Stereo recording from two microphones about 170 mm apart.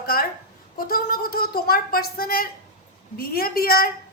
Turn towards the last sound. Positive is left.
turn(degrees=60)  # may be behind; listen again after turning